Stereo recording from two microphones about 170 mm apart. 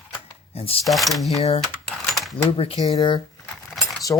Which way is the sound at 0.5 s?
35° left (ahead or behind).